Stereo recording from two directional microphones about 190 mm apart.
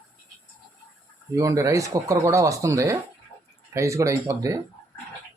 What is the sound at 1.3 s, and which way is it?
Speech, 15° right (ahead or behind).